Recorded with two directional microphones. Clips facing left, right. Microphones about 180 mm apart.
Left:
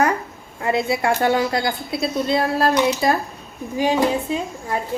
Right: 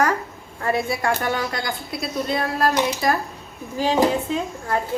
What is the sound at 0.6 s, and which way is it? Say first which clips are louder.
A woman's voice: left 2 dB; 20° left (ahead or behind).